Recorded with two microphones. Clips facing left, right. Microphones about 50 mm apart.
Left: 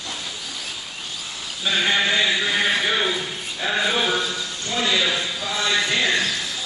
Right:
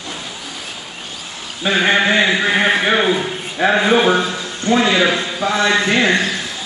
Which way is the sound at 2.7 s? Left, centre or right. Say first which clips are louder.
Right 7 dB; right.